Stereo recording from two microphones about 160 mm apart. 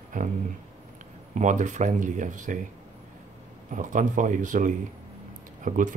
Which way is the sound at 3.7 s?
55° right (ahead or behind).